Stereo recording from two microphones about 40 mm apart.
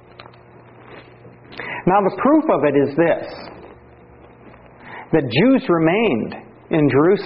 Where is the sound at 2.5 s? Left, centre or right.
Left.